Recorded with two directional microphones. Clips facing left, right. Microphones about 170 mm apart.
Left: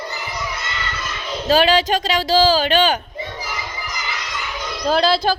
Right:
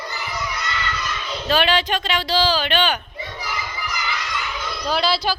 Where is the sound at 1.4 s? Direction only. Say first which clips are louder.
Left 4 dB; 40° left (ahead or behind).